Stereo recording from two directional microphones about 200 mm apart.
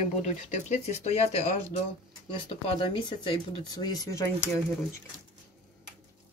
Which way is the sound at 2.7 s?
25° left (ahead or behind).